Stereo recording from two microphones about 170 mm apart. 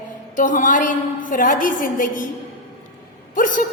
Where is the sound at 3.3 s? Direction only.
50° left (ahead or behind).